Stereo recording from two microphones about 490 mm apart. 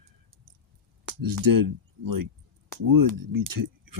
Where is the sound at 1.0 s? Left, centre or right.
Right.